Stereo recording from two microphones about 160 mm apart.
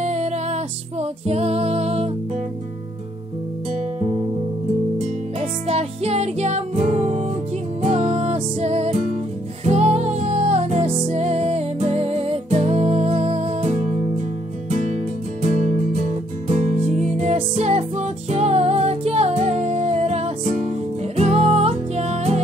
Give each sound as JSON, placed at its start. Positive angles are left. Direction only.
{"t": 0.0, "sound": "music", "side_deg": -45}
{"t": 4.9, "sound": "music", "side_deg": -40}